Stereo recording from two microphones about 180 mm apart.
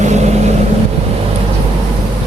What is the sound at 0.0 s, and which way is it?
Vehicle, 40° right (ahead or behind).